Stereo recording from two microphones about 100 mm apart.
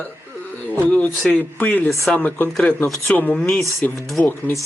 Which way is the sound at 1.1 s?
Centre (ahead or behind).